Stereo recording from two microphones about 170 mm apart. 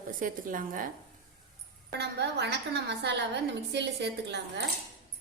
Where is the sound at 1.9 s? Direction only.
80° right.